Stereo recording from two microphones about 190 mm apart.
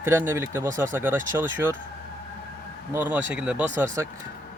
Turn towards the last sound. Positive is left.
turn(degrees=-10)  # may be behind; listen again after turning